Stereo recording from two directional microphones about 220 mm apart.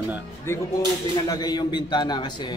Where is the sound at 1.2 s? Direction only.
15° left (ahead or behind).